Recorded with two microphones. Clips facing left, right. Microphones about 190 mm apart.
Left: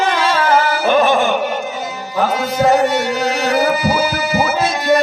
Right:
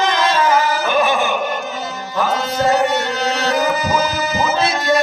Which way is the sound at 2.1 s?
10° left (ahead or behind).